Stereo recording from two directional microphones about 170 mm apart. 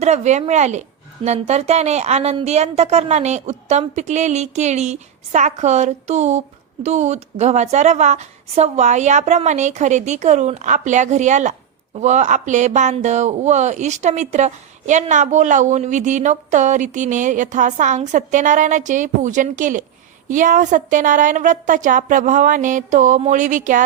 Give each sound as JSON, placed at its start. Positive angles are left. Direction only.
{"t": 0.0, "sound": "a woman's voice", "side_deg": -40}